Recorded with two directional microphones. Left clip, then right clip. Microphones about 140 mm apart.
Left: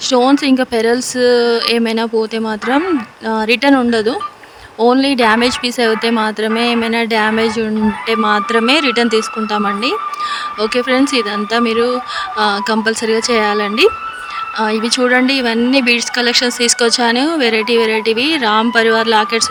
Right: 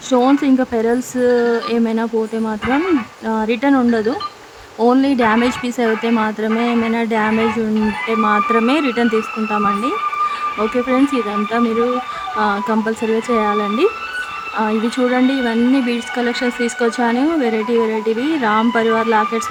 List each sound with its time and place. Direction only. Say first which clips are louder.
0.1 s a woman's voice: left 2 dB; 45° left (ahead or behind)
10.6 s speech: left 3 dB; 55° left (ahead or behind)
14.9 s speech: left 5 dB; 60° left (ahead or behind)